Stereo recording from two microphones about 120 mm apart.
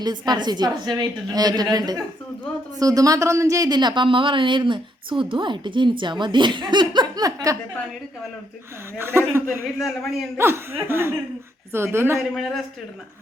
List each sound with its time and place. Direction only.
0.0 s speech: 35° right (ahead or behind)
9.0 s speech: 20° right (ahead or behind)
9.7 s a man's voice: centre (ahead or behind)
10.3 s speech: 20° right (ahead or behind)
12.4 s a man's voice: centre (ahead or behind)